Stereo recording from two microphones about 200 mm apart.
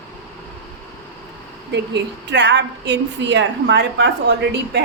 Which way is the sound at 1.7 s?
60° right (ahead or behind).